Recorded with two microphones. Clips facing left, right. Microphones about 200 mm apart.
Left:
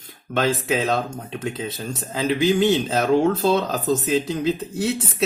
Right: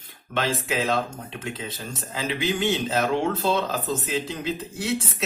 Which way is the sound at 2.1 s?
40° left (ahead or behind).